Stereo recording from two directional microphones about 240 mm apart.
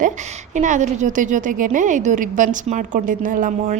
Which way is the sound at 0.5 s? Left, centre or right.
Right.